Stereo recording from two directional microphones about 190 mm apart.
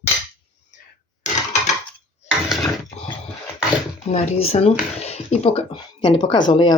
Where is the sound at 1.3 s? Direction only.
40° left (ahead or behind).